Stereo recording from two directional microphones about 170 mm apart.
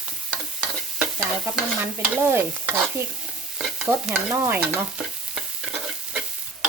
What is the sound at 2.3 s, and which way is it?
Stir, 10° right (ahead or behind).